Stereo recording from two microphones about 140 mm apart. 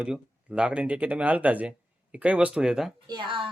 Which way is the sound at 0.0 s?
5° right (ahead or behind).